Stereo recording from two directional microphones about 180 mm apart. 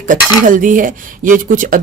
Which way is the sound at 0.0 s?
45° right (ahead or behind).